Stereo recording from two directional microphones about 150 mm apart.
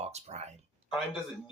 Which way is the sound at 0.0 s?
45° right (ahead or behind).